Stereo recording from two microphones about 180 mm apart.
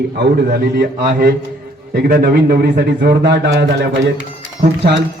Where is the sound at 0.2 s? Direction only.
60° right (ahead or behind).